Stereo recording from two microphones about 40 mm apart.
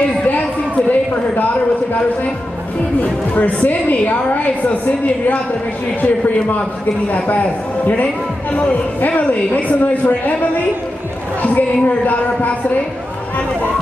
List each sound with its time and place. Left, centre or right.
0.8 s a sound: left
3.0 s a woman's voice: left
11.4 s a woman's voice: left